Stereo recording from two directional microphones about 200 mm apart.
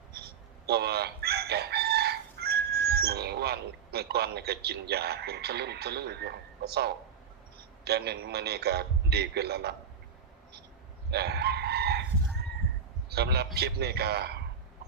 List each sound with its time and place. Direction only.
0.7 s chicken: 55° right (ahead or behind)
7.9 s a man's voice: 55° right (ahead or behind)
11.1 s chicken: 55° right (ahead or behind)
13.1 s a man's voice: 55° right (ahead or behind)